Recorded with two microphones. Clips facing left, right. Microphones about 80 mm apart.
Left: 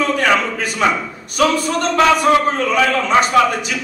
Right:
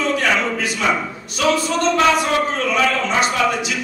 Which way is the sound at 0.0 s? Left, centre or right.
Left.